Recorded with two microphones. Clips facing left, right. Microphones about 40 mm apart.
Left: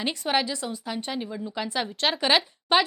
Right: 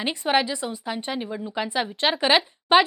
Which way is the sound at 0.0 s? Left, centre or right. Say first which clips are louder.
Right 3 dB; centre.